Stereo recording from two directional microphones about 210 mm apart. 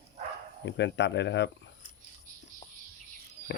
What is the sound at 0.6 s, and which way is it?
Speech, 55° left (ahead or behind).